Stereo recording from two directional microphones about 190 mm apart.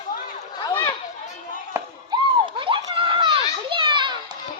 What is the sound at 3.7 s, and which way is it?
Children playing, 25° right (ahead or behind).